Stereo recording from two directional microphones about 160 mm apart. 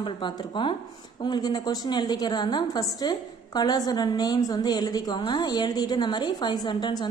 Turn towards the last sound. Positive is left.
turn(degrees=25)  # may be behind; listen again after turning